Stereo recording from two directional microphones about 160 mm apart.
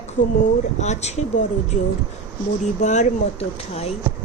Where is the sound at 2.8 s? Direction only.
45° left (ahead or behind).